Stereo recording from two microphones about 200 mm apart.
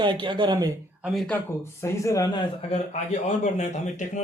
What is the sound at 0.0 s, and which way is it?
Speech, 25° right (ahead or behind).